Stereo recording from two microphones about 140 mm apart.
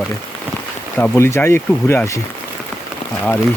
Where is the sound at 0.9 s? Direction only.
10° left (ahead or behind).